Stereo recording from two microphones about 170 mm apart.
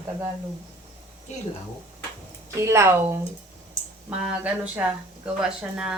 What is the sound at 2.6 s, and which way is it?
Speech, 15° right (ahead or behind).